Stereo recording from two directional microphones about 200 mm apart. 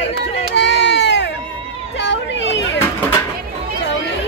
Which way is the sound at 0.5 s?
60° left (ahead or behind).